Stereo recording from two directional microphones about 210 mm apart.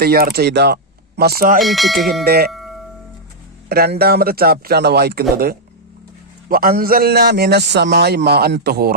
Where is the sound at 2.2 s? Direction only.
50° right (ahead or behind).